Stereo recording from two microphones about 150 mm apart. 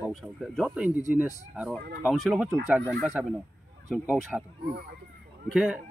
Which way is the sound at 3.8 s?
10° right (ahead or behind).